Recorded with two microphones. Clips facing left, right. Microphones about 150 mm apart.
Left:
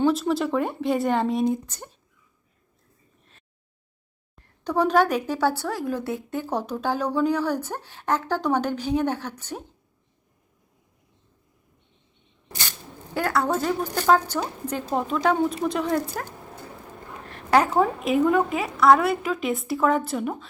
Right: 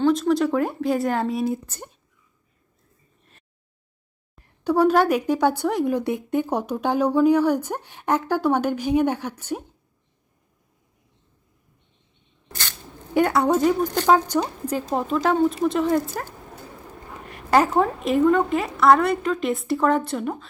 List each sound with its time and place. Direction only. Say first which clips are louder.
0.0 s a woman's voice: right 3 dB; 5° left (ahead or behind)
4.6 s speech: right 3 dB; 10° right (ahead or behind)
13.1 s a woman's voice: right 5 dB; 20° right (ahead or behind)
13.8 s speech: right 4 dB; 10° left (ahead or behind)
14.1 s a woman's voice: right 1 dB; 10° right (ahead or behind)
17.3 s a woman's voice: right 1 dB; centre (ahead or behind)